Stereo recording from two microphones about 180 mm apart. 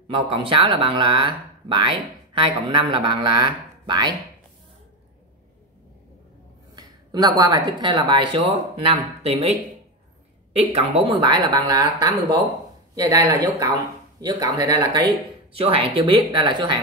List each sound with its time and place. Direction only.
0.1 s speech: 30° right (ahead or behind)
6.7 s a woman's voice: 20° right (ahead or behind)
11.1 s speech: 25° right (ahead or behind)